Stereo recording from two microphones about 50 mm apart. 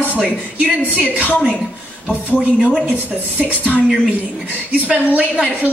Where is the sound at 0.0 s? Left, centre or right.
Right.